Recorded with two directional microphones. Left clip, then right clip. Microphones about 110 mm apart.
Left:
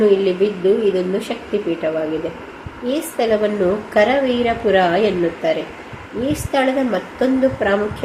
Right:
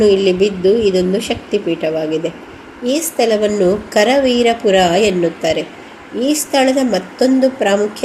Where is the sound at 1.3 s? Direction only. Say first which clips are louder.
Right 5 dB; 70° right (ahead or behind).